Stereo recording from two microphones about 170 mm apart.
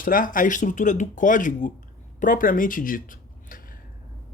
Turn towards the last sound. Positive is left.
turn(degrees=55)  # may be behind; listen again after turning